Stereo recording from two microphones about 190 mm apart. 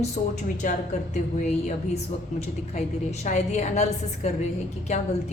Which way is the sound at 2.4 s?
35° left (ahead or behind).